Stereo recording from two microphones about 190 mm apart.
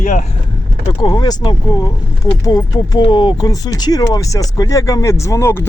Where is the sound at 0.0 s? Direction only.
40° left (ahead or behind).